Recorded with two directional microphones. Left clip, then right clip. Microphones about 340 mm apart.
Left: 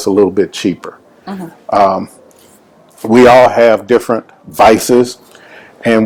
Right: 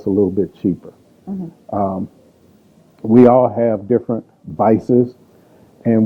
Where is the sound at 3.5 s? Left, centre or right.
Centre.